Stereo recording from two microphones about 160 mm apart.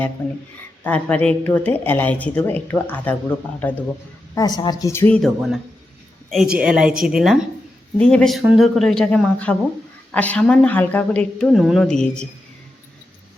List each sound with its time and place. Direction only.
0.2 s a woman's voice: 10° left (ahead or behind)
4.4 s a woman's voice: 25° left (ahead or behind); by 5.3 s 10° left (ahead or behind)
6.3 s a woman's voice: 5° right (ahead or behind)